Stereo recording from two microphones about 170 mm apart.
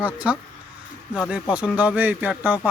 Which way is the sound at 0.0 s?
10° right (ahead or behind).